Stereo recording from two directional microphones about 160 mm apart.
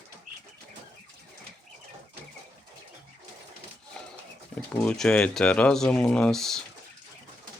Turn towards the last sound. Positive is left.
turn(degrees=5)  # may be behind; listen again after turning